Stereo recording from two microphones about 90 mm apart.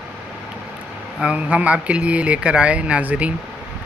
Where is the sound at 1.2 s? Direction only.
15° right (ahead or behind).